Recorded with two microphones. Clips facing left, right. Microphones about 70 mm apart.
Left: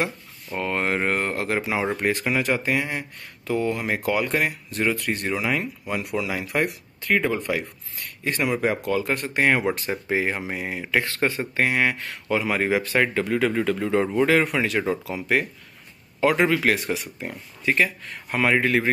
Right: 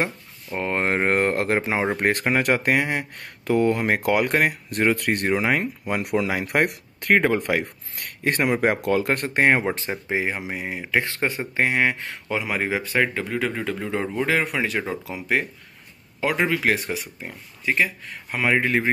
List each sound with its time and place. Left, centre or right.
0.0 s speech: right
2.0 s speech: right
5.3 s speech: right
9.4 s speech: right; by 11.0 s centre
11.1 s speech: right
12.6 s speech: centre